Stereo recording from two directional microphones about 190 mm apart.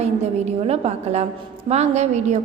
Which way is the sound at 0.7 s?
35° right (ahead or behind).